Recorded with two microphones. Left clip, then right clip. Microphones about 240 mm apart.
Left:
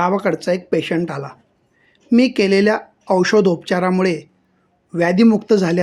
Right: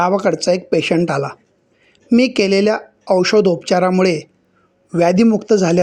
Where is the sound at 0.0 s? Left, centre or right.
Centre.